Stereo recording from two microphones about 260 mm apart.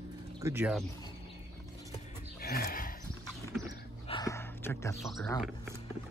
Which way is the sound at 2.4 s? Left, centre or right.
Left.